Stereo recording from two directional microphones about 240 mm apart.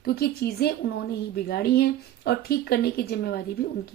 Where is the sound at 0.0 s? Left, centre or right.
Left.